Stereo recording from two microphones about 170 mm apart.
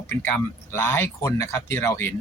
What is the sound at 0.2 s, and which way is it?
Speech, 15° left (ahead or behind).